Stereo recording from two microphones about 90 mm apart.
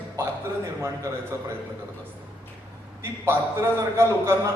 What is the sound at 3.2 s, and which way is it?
A man's voice, 30° right (ahead or behind).